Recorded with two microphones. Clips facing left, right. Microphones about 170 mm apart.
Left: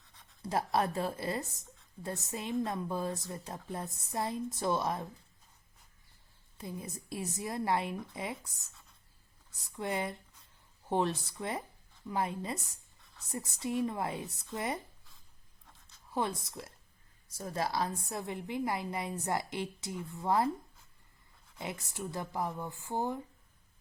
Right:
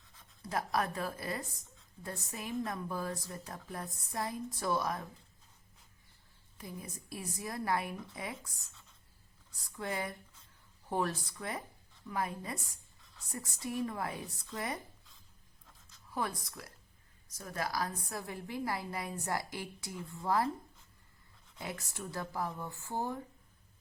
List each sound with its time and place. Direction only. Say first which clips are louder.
0.4 s a woman's voice: left 3 dB; 30° left (ahead or behind)
6.6 s a woman's voice: left 4 dB; 25° left (ahead or behind)
9.7 s a woman's voice: left 3 dB; 25° left (ahead or behind)
16.1 s a woman's voice: left 3 dB; 25° left (ahead or behind)
21.6 s a woman's voice: left 3 dB; 20° left (ahead or behind)